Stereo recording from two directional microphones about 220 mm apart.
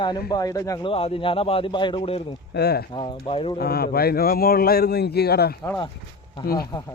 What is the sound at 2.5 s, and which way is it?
Speech, 45° left (ahead or behind).